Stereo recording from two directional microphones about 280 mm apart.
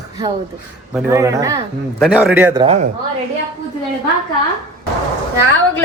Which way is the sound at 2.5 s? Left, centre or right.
Right.